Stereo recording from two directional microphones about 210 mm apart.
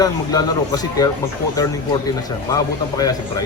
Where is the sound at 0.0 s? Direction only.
20° left (ahead or behind).